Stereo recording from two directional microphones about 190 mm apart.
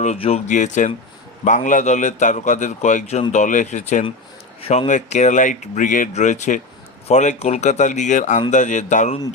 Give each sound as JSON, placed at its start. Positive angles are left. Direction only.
{"t": 0.0, "sound": "speech", "side_deg": 35}